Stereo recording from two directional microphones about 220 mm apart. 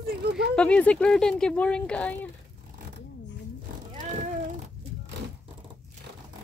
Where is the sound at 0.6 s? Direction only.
5° left (ahead or behind).